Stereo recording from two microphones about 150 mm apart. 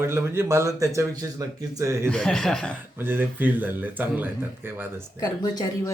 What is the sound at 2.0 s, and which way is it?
Speech, 5° left (ahead or behind).